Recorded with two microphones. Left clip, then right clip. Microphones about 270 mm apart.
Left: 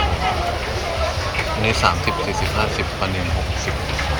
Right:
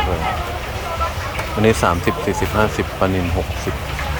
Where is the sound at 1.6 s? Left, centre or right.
Right.